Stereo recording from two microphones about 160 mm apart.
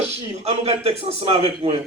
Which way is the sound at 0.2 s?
40° right (ahead or behind).